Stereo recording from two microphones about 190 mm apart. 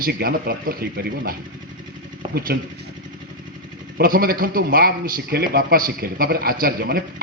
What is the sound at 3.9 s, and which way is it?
A man's voice, 50° right (ahead or behind).